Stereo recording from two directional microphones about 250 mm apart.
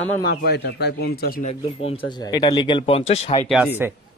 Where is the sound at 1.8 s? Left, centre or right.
Centre.